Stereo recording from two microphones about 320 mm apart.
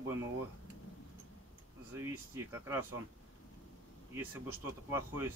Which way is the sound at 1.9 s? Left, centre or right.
Centre.